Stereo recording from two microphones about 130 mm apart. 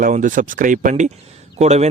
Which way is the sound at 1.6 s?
60° right (ahead or behind).